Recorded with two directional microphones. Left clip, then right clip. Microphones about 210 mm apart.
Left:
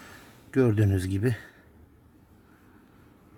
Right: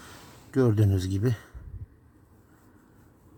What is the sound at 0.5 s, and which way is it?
Speech, 5° left (ahead or behind).